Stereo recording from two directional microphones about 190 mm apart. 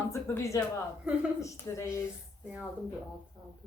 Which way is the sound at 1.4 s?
15° left (ahead or behind).